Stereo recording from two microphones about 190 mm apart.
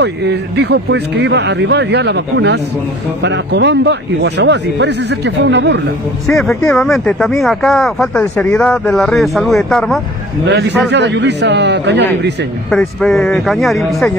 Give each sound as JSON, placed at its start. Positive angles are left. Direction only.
{"t": 0.0, "sound": "speech", "side_deg": -65}
{"t": 6.2, "sound": "speech", "side_deg": 0}
{"t": 10.4, "sound": "speech", "side_deg": -65}
{"t": 12.6, "sound": "speech", "side_deg": 0}